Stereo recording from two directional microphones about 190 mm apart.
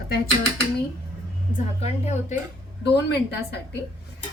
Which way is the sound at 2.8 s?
60° left (ahead or behind).